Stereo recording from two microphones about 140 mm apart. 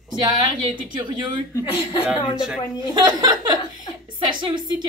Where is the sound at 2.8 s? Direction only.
30° right (ahead or behind).